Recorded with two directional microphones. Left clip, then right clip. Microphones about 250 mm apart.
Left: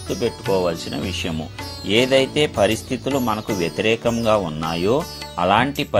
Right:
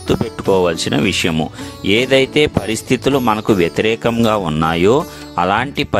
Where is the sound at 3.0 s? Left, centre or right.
Right.